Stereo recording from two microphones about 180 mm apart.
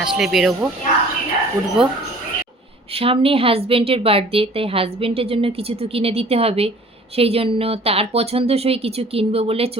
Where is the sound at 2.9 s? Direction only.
30° right (ahead or behind).